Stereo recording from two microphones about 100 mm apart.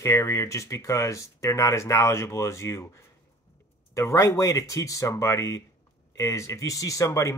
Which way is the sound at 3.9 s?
30° left (ahead or behind).